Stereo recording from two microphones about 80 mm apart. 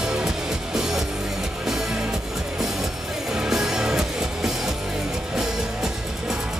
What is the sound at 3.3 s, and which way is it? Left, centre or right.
Music, centre.